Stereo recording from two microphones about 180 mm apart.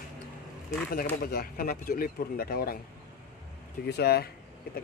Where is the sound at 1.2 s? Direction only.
55° left (ahead or behind).